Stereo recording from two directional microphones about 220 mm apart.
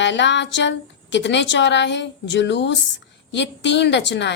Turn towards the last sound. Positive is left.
turn(degrees=50)  # may be behind; listen again after turning